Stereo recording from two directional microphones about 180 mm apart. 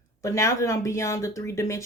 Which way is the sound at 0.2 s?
15° left (ahead or behind).